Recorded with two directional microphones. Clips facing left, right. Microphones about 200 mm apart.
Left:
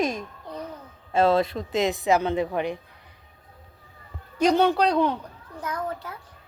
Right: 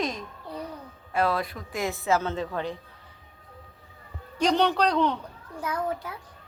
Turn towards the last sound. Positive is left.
turn(degrees=-10)  # may be behind; listen again after turning